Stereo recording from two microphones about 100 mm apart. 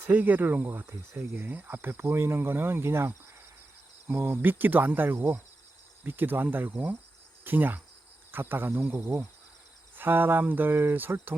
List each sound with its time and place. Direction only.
0.0 s speech: 20° right (ahead or behind)
7.4 s cricket: 20° right (ahead or behind)
8.3 s speech: 20° right (ahead or behind)